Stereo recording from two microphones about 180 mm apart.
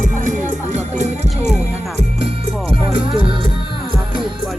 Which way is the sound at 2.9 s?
30° right (ahead or behind).